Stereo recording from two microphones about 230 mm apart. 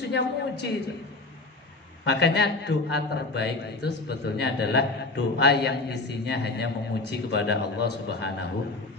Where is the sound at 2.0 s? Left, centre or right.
Left.